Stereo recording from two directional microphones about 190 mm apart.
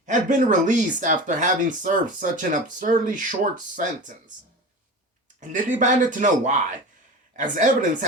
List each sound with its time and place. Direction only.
0.0 s speech: 40° right (ahead or behind)
5.4 s speech: 40° right (ahead or behind)